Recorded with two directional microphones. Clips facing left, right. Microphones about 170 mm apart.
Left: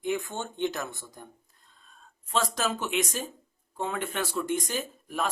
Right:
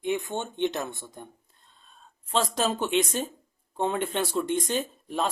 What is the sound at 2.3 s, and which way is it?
Speech, 30° right (ahead or behind).